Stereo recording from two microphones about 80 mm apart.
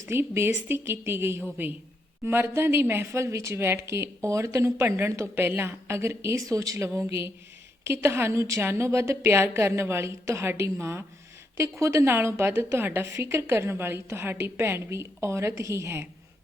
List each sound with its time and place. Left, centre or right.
0.0 s a woman's voice: right